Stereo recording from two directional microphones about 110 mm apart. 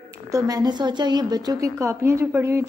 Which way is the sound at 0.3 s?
30° right (ahead or behind).